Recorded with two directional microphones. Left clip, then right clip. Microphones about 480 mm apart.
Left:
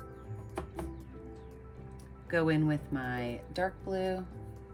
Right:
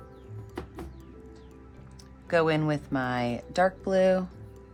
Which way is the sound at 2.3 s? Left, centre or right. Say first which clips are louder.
Right 5 dB; centre.